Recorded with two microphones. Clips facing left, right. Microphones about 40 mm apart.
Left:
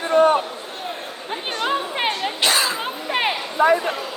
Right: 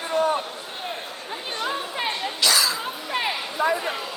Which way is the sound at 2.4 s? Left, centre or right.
Left.